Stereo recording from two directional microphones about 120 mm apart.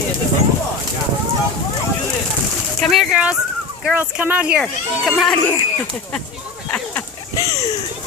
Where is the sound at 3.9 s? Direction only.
15° right (ahead or behind).